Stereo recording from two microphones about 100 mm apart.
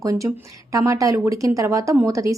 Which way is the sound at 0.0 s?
35° right (ahead or behind).